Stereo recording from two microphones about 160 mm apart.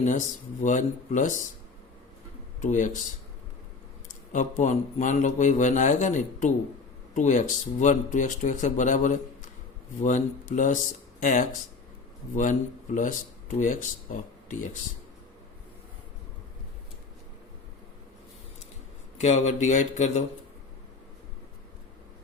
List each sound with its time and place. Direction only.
0.0 s a man's voice: 50° left (ahead or behind)
2.6 s a man's voice: 50° left (ahead or behind)
4.1 s a man's voice: 50° left (ahead or behind)
14.4 s speech: 50° left (ahead or behind)
19.2 s a man's voice: 45° left (ahead or behind)